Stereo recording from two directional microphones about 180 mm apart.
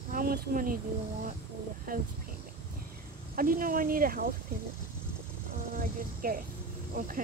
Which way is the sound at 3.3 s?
50° right (ahead or behind).